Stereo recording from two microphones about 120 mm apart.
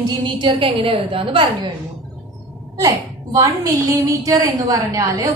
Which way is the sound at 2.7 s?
25° right (ahead or behind).